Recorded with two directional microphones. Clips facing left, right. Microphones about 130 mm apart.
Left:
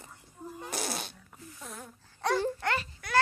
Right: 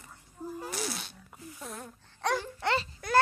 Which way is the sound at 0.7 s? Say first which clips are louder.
Left 5 dB; 45° left (ahead or behind).